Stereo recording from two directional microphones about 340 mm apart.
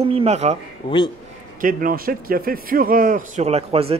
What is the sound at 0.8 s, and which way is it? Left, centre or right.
Speech, centre.